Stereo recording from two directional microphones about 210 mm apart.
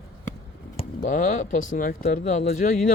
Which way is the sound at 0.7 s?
35° left (ahead or behind).